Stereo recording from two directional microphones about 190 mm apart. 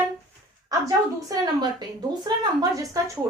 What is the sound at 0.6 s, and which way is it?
A woman's voice, 20° right (ahead or behind).